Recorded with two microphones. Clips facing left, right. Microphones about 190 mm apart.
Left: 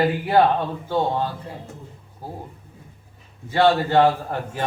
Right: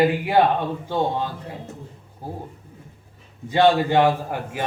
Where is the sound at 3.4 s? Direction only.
15° right (ahead or behind).